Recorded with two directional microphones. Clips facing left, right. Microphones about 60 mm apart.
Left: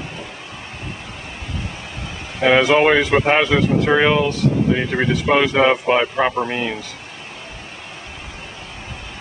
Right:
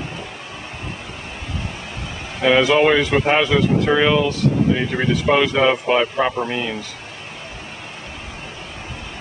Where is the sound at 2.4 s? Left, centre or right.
Centre.